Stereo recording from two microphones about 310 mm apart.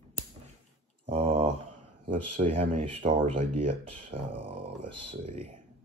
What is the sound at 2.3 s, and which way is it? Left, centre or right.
Speech, right.